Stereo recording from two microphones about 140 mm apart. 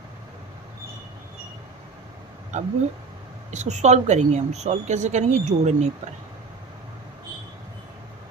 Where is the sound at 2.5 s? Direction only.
55° right (ahead or behind).